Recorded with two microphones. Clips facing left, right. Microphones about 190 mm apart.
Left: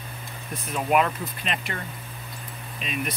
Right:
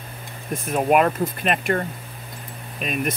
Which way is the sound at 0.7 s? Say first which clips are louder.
Right 5 dB; 50° right (ahead or behind).